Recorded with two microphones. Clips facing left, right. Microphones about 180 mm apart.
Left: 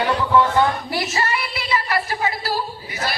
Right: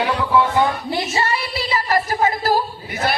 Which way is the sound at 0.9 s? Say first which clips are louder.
Right 2 dB; 25° right (ahead or behind).